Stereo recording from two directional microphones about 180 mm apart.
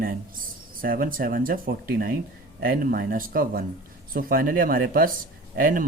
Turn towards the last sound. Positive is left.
turn(degrees=-50)  # may be behind; listen again after turning